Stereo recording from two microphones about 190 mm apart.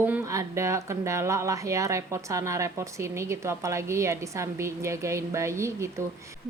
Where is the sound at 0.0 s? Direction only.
15° right (ahead or behind).